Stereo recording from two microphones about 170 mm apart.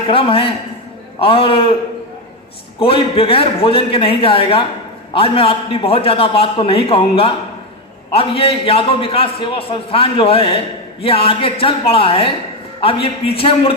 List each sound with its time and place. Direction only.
0.1 s a man's voice: 30° left (ahead or behind)
2.7 s a man's voice: 30° left (ahead or behind)